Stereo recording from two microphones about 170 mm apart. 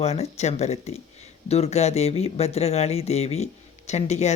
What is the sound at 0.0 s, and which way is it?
Speech, 40° left (ahead or behind).